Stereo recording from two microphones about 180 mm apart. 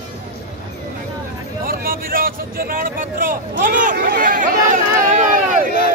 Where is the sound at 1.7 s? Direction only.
55° right (ahead or behind).